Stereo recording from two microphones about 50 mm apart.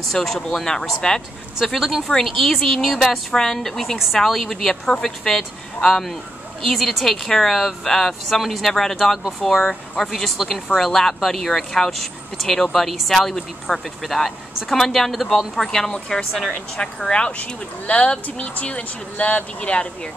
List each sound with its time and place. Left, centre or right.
0.0 s a woman's voice: centre
1.6 s a woman's voice: centre; by 20.1 s left